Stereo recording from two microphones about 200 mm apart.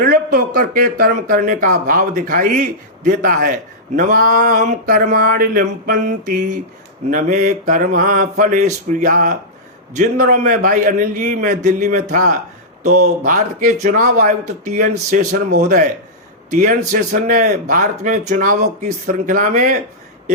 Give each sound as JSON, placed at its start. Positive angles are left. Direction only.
{"t": 0.0, "sound": "a man's voice", "side_deg": -45}